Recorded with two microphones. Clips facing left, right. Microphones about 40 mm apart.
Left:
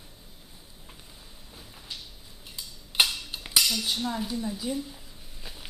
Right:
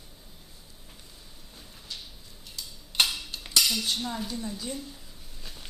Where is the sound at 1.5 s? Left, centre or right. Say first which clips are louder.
Left 1 dB; centre.